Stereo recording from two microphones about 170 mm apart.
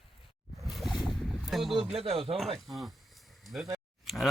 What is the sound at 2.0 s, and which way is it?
Speech, 35° right (ahead or behind).